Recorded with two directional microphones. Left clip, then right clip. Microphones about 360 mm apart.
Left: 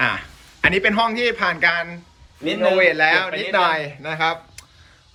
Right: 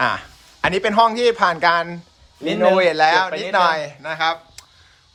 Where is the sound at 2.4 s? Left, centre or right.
Right.